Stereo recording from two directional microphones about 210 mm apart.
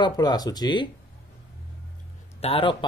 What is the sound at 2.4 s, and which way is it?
Speech, 25° left (ahead or behind).